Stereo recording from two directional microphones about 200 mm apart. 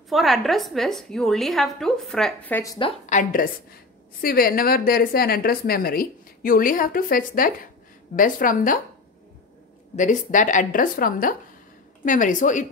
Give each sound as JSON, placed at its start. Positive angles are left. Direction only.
{"t": 0.1, "sound": "a woman's voice", "side_deg": 0}
{"t": 3.1, "sound": "a woman's voice", "side_deg": 40}
{"t": 9.9, "sound": "speech", "side_deg": 40}